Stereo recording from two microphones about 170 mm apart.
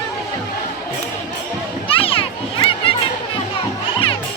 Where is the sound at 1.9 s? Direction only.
30° left (ahead or behind).